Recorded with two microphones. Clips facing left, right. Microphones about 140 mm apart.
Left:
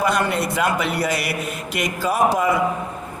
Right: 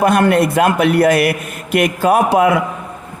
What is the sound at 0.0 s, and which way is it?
A man's voice, 55° right (ahead or behind).